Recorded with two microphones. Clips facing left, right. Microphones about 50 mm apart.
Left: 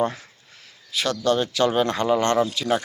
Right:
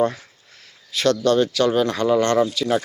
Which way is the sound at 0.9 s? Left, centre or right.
Centre.